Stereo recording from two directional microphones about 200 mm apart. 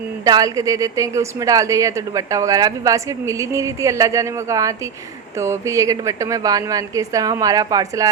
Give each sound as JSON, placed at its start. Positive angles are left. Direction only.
{"t": 0.3, "sound": "speech", "side_deg": -20}